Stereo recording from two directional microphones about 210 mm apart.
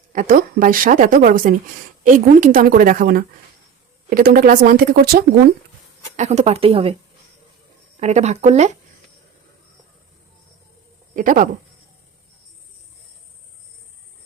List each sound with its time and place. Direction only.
0.1 s a woman's voice: 40° right (ahead or behind)
6.1 s speech: 30° right (ahead or behind)
7.9 s a woman's voice: 30° right (ahead or behind)
11.1 s speech: 40° right (ahead or behind)